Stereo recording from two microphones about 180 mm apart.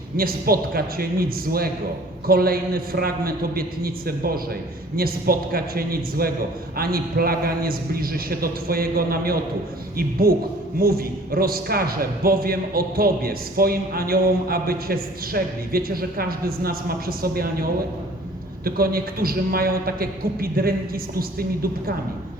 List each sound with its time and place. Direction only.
0.2 s a man's voice: 55° right (ahead or behind)